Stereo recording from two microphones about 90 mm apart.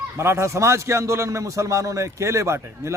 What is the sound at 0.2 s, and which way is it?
A man's voice, 30° right (ahead or behind).